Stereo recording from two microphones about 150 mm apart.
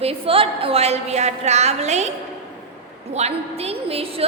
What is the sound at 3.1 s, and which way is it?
A woman's voice, 45° right (ahead or behind).